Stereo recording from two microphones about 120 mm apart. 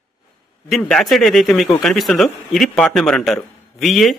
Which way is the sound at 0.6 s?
5° left (ahead or behind).